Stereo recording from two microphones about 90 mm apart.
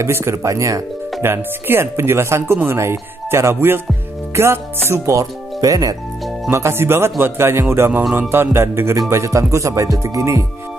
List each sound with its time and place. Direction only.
0.0 s speech: 30° right (ahead or behind)
6.5 s speech: 30° right (ahead or behind)